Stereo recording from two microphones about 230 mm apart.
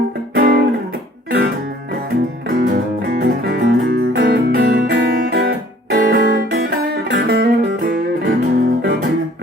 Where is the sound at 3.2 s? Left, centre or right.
Right.